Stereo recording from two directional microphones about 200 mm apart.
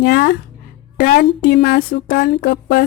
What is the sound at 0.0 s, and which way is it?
Speech, 50° left (ahead or behind).